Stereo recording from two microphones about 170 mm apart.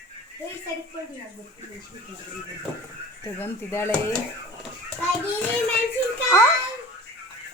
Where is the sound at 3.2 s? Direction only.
15° left (ahead or behind).